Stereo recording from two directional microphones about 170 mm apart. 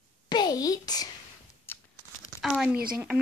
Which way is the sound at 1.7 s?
15° left (ahead or behind).